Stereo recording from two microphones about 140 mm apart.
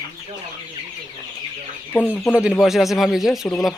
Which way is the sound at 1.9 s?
15° left (ahead or behind).